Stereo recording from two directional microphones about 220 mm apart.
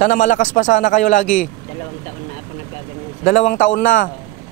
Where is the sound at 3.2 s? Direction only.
30° left (ahead or behind).